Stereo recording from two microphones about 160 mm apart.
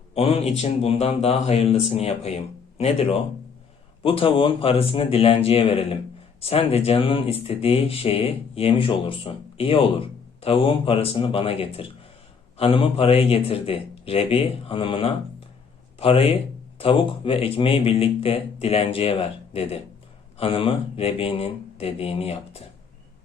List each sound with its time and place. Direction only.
0.1 s speech: 40° left (ahead or behind)